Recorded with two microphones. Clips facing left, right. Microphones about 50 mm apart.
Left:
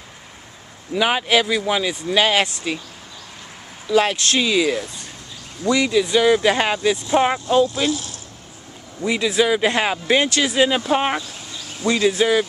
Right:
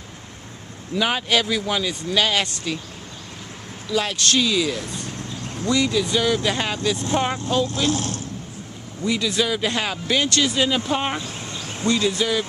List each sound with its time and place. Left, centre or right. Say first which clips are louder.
0.9 s speech: left 3 dB; centre
3.8 s speech: left 5 dB; left
7.9 s speech: right 2 dB; right
9.0 s speech: left 4 dB; centre